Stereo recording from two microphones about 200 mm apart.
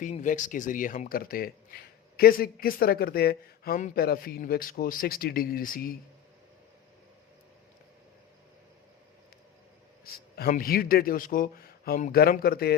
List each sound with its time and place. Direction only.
0.0 s speech: 40° left (ahead or behind)
10.0 s speech: 50° left (ahead or behind)